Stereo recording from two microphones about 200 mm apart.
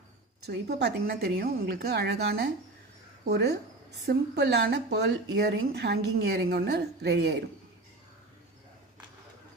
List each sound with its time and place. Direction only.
0.5 s speech: 55° right (ahead or behind)